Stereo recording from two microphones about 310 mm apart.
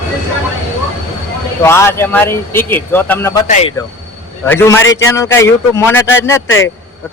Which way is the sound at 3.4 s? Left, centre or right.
Left.